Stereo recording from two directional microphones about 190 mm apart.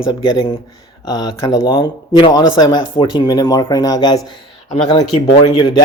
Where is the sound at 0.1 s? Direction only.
20° left (ahead or behind).